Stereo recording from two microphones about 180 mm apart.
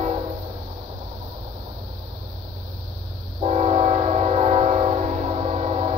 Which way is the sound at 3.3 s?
35° right (ahead or behind).